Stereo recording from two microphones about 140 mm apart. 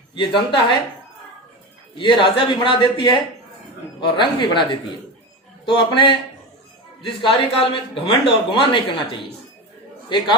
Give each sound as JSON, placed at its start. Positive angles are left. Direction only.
{"t": 0.1, "sound": "a man's voice", "side_deg": 35}
{"t": 2.0, "sound": "a man's voice", "side_deg": 35}